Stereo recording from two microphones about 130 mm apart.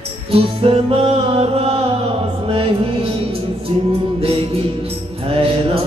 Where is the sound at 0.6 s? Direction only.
45° right (ahead or behind).